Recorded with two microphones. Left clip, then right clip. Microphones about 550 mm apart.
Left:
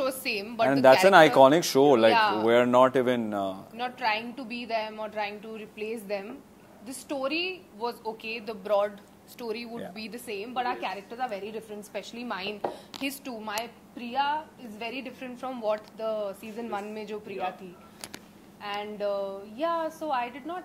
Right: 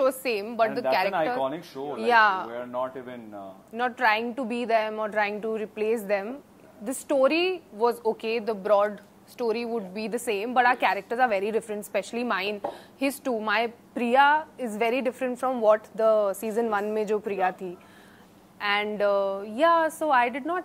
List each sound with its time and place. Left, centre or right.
0.0 s a woman's voice: right
1.1 s speech: left
2.1 s a woman's voice: right
2.5 s speech: left
3.7 s a woman's voice: right
18.6 s a woman's voice: right